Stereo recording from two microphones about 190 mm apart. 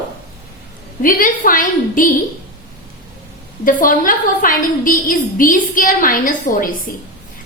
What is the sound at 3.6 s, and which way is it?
A woman's voice, 45° left (ahead or behind).